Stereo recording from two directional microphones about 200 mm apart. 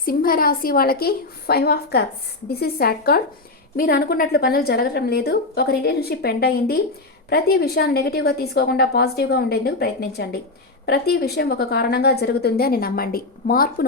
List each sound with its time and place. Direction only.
0.0 s a woman's voice: 45° left (ahead or behind)